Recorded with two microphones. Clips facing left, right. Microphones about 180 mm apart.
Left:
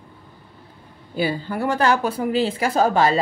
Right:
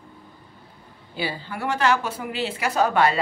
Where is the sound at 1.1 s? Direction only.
45° left (ahead or behind).